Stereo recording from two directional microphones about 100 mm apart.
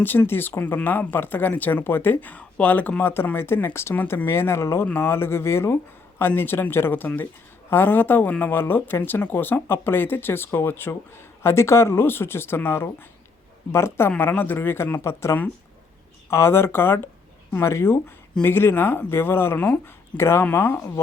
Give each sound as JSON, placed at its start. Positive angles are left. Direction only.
{"t": 0.0, "sound": "speech", "side_deg": 20}